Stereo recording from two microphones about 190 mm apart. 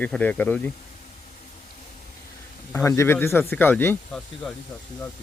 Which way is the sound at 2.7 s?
15° left (ahead or behind).